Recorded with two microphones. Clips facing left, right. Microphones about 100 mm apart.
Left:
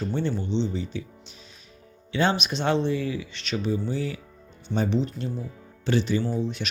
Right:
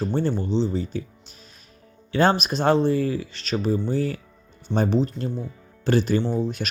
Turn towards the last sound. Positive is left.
turn(degrees=-40)  # may be behind; listen again after turning